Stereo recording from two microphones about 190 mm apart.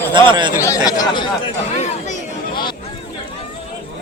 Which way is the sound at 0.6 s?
20° left (ahead or behind).